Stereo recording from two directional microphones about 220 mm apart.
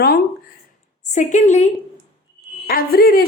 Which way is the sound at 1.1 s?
35° left (ahead or behind).